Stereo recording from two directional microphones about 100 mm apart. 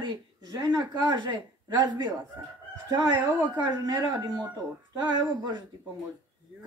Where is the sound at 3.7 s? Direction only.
40° right (ahead or behind).